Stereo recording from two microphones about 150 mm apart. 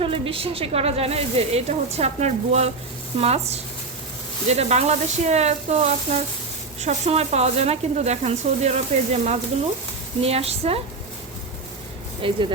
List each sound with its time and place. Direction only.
0.0 s speech: 40° right (ahead or behind)
12.2 s speech: 35° right (ahead or behind)